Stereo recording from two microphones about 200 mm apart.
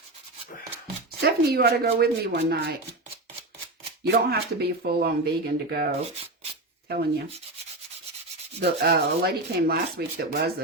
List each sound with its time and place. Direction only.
1.2 s sanding: 55° right (ahead or behind)
4.0 s sanding: 55° right (ahead or behind)
8.6 s sanding: 55° right (ahead or behind)